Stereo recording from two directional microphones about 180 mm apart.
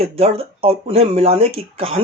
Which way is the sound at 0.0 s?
35° right (ahead or behind).